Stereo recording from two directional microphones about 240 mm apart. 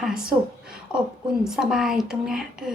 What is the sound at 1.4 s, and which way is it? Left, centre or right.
A woman's voice, centre.